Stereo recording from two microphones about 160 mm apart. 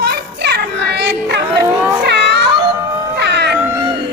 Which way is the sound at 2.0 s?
90° right.